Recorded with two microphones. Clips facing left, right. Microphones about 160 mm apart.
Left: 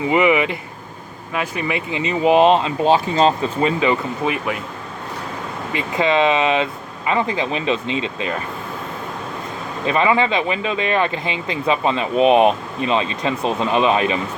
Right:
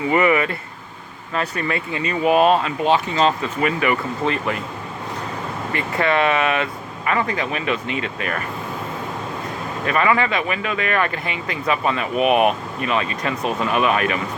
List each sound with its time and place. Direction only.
0.1 s speech: 15° left (ahead or behind)
4.3 s speech: 5° left (ahead or behind)
5.7 s speech: 20° left (ahead or behind)
9.8 s speech: 25° left (ahead or behind)